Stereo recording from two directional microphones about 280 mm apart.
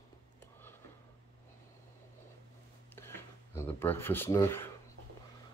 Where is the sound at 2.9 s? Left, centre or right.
Centre.